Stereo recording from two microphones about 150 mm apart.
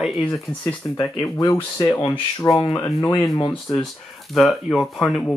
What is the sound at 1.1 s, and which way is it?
Speech, 25° left (ahead or behind).